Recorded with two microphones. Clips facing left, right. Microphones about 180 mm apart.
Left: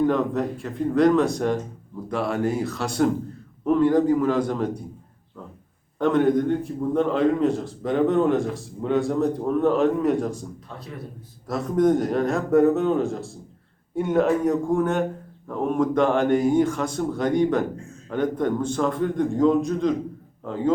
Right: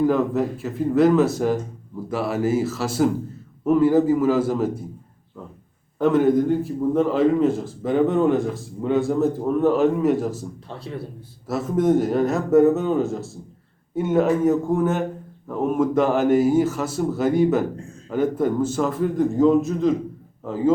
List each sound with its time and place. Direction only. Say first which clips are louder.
0.0 s a man's voice: right 2 dB; 5° right (ahead or behind)
6.0 s a man's voice: right 2 dB; 5° right (ahead or behind)
10.8 s a man's voice: right 6 dB; 30° right (ahead or behind)
11.4 s a man's voice: even; 5° right (ahead or behind)